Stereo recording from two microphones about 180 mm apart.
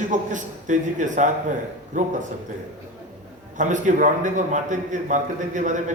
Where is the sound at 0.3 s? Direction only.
45° right (ahead or behind).